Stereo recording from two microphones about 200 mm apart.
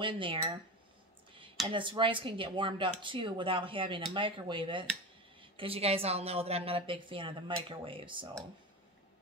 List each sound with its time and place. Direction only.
0.0 s speech: 25° right (ahead or behind)
1.7 s speech: 25° right (ahead or behind)